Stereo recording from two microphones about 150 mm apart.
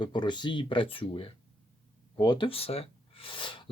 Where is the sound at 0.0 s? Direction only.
30° left (ahead or behind).